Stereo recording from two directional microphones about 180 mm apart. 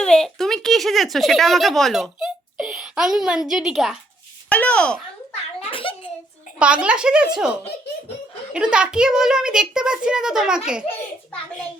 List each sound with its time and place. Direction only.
0.0 s a woman's voice: 5° left (ahead or behind)
4.4 s speech: 5° left (ahead or behind)
5.3 s a sound: 30° left (ahead or behind)
6.6 s a child's voice: 5° right (ahead or behind)
8.5 s a child's voice: 5° right (ahead or behind)